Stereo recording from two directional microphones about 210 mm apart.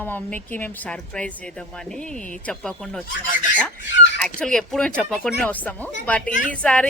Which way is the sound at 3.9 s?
55° left (ahead or behind).